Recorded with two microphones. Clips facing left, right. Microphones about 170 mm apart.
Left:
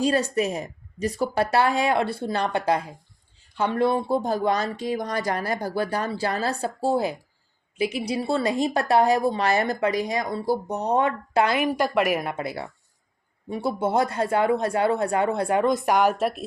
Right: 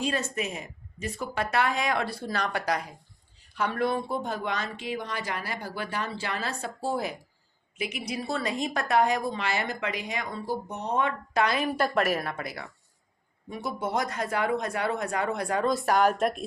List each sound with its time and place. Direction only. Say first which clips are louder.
0.0 s a woman's voice: left 7 dB; 35° left (ahead or behind)
11.7 s speech: left 3 dB; 10° left (ahead or behind)
16.1 s speech: left 2 dB; 5° left (ahead or behind)